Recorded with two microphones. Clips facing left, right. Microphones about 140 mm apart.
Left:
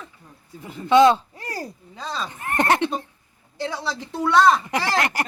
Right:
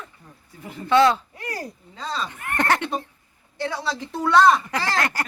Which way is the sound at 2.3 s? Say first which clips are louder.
Left 3 dB; 30° left (ahead or behind).